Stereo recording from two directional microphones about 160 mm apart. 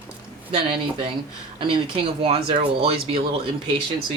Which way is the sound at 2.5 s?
35° right (ahead or behind).